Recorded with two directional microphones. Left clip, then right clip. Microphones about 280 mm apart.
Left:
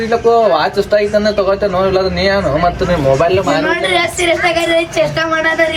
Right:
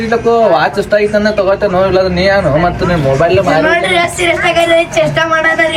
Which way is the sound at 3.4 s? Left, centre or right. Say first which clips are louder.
Right 4 dB; centre.